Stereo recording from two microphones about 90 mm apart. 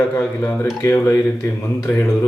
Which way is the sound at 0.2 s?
15° left (ahead or behind).